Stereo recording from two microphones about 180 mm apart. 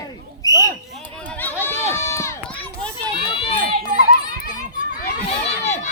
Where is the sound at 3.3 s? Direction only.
35° left (ahead or behind).